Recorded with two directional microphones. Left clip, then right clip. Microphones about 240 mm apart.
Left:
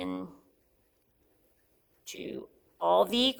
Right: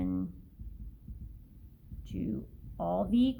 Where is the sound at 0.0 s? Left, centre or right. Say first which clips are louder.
Right 1 dB; left.